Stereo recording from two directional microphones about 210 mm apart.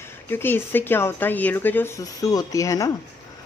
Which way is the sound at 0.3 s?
10° left (ahead or behind).